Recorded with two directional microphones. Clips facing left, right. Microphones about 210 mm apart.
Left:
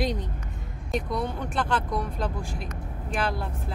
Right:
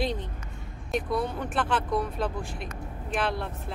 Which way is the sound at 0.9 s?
Centre (ahead or behind).